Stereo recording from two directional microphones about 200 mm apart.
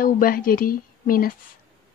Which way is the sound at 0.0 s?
45° left (ahead or behind).